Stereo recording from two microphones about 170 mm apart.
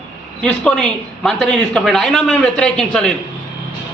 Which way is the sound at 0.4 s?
5° left (ahead or behind).